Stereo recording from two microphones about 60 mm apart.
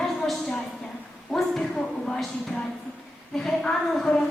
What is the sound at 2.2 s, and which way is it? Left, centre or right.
A woman's voice, centre.